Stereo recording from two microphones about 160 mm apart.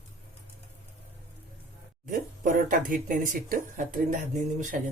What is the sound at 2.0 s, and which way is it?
Speech, 55° right (ahead or behind).